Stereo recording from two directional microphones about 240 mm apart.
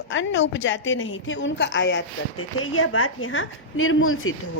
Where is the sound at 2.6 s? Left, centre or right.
Left.